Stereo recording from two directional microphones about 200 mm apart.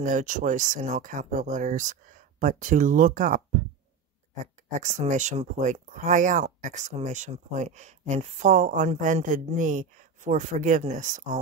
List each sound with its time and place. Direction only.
0.0 s speech: 40° right (ahead or behind)
4.6 s speech: 35° right (ahead or behind)